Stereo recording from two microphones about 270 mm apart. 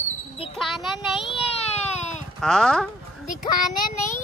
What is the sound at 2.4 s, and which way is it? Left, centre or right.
Speech, centre.